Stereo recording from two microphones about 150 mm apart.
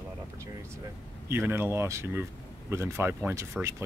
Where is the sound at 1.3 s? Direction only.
15° right (ahead or behind).